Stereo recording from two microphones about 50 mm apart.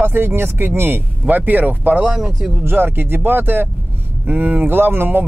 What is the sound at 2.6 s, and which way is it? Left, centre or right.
Speech, right.